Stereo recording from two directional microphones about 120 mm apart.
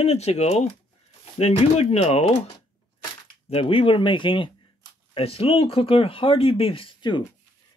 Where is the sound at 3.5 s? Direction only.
50° left (ahead or behind).